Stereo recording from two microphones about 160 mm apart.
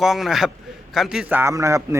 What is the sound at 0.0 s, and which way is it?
A man's voice, centre (ahead or behind).